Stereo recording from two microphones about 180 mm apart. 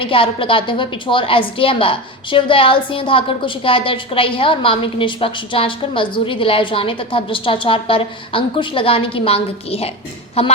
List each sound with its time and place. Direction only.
0.0 s a woman's voice: 30° left (ahead or behind)